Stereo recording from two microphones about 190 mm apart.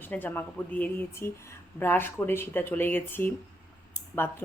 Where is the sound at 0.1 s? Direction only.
10° left (ahead or behind).